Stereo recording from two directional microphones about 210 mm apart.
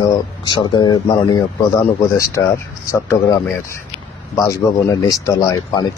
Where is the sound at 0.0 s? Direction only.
20° left (ahead or behind).